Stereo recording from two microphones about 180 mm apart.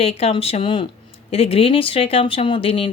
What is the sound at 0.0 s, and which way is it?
A woman's voice, 35° left (ahead or behind).